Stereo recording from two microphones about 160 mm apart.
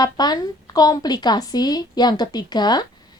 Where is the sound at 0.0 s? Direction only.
25° left (ahead or behind).